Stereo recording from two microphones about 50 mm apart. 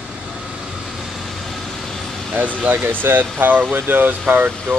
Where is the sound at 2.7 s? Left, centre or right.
Right.